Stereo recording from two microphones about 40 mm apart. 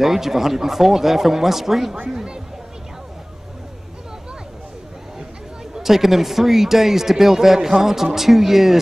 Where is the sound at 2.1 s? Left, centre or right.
Centre.